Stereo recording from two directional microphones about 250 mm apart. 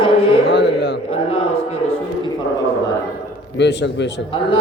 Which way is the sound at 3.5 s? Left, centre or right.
Left.